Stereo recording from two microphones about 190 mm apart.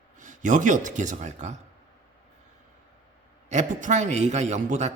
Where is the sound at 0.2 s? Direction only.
40° right (ahead or behind).